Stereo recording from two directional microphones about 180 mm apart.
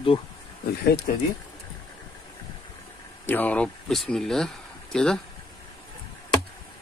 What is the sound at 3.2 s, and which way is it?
Speech, 10° left (ahead or behind).